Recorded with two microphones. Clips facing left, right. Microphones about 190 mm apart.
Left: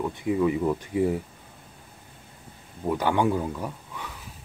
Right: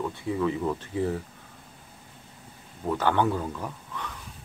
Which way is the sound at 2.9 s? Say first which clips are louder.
Left 1 dB; 10° left (ahead or behind).